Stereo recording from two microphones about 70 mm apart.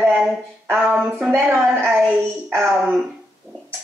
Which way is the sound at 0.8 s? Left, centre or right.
Right.